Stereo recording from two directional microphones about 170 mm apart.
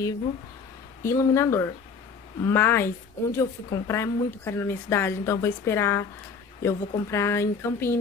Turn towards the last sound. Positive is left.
turn(degrees=15)  # may be behind; listen again after turning